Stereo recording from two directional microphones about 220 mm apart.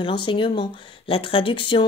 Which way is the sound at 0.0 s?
20° left (ahead or behind).